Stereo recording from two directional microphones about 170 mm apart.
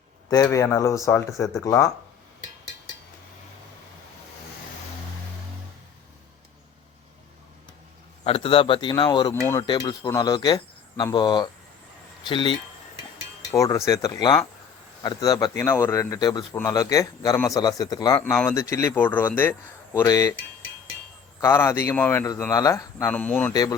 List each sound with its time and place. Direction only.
0.5 s speech: 20° left (ahead or behind)
8.2 s speech: 35° left (ahead or behind)
13.5 s speech: 20° left (ahead or behind)
21.4 s speech: 15° left (ahead or behind)
23.0 s speech: 10° left (ahead or behind)
23.5 s speech: 20° left (ahead or behind)